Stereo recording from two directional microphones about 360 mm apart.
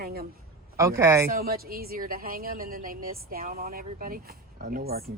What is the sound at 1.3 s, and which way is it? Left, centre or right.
A woman's voice, right.